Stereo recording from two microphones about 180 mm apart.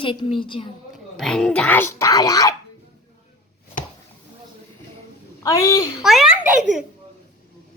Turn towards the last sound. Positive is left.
turn(degrees=0)  # may be behind; listen again after turning